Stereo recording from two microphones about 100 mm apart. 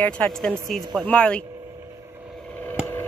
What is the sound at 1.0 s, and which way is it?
Speech, 10° left (ahead or behind).